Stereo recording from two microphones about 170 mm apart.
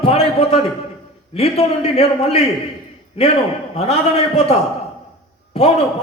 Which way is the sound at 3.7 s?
35° left (ahead or behind).